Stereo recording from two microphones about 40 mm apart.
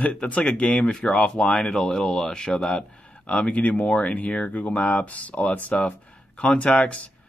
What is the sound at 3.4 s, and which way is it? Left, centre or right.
Speech, left.